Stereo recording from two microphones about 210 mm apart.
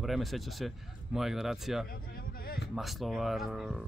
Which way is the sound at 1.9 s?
45° left (ahead or behind).